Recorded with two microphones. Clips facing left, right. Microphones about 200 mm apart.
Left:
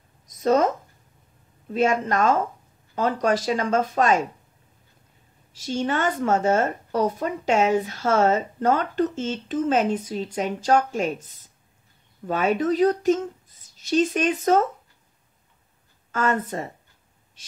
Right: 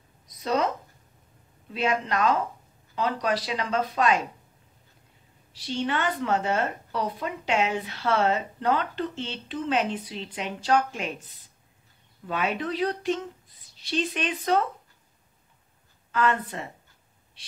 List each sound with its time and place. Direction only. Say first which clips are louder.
0.3 s a sound: left 6 dB; 45° left (ahead or behind)
1.7 s a woman's voice: left 5 dB; 45° left (ahead or behind)
5.5 s a woman's voice: left 3 dB; 45° left (ahead or behind)
16.1 s a woman's voice: left 2 dB; 45° left (ahead or behind)